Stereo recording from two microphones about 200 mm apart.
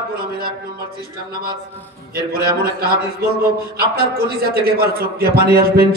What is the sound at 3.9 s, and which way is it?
A man's voice, 50° right (ahead or behind).